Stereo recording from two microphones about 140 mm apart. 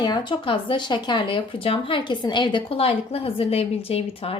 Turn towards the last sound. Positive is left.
turn(degrees=40)  # may be behind; listen again after turning